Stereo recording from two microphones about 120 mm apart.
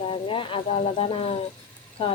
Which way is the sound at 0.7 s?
65° left (ahead or behind).